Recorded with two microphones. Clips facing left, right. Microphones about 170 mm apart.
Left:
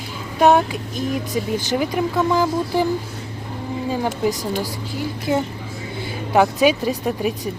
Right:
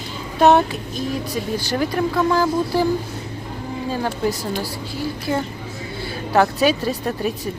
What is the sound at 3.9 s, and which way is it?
A woman's voice, 15° left (ahead or behind).